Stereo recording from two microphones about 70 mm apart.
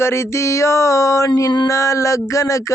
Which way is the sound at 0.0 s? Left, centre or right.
Left.